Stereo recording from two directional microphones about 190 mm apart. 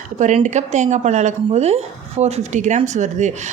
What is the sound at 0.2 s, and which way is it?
Speech, 40° right (ahead or behind).